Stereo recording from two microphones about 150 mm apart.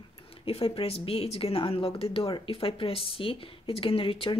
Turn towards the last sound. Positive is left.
turn(degrees=35)  # may be behind; listen again after turning